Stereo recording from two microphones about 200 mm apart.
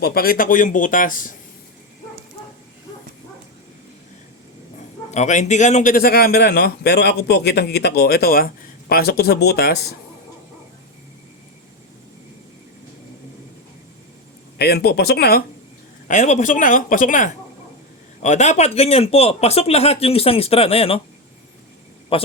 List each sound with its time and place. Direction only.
0.0 s speech: 50° left (ahead or behind)
5.1 s a man's voice: 35° left (ahead or behind)
14.6 s a man's voice: 50° left (ahead or behind)
16.0 s speech: 35° left (ahead or behind)
22.1 s a man's voice: 30° left (ahead or behind)